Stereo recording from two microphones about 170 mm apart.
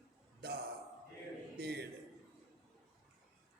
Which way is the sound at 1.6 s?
70° right (ahead or behind).